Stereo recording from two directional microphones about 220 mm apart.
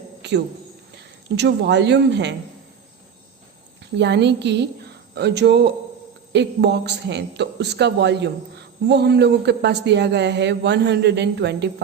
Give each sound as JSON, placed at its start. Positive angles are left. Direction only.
{"t": 0.2, "sound": "cricket", "side_deg": -50}
{"t": 1.4, "sound": "a man's voice", "side_deg": -50}
{"t": 3.9, "sound": "a man's voice", "side_deg": -50}